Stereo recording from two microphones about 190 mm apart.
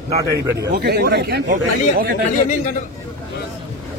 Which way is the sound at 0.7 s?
60° right (ahead or behind).